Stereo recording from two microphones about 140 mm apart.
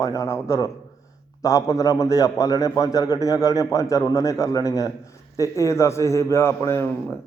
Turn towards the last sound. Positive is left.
turn(degrees=20)  # may be behind; listen again after turning